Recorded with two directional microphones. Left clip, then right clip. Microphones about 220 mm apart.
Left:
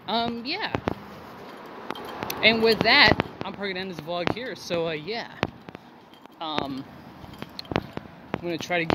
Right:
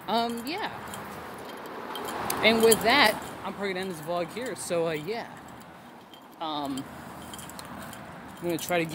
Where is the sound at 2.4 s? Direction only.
5° left (ahead or behind).